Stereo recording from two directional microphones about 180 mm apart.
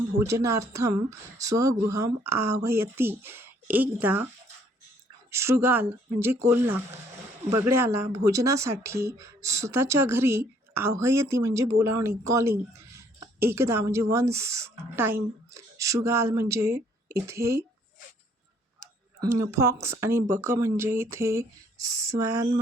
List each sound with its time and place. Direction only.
0.2 s speech: 15° right (ahead or behind)
5.3 s speech: 15° right (ahead or behind)
19.2 s speech: 15° right (ahead or behind)